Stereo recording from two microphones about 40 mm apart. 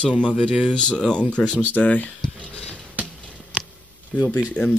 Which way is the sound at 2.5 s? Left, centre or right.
Left.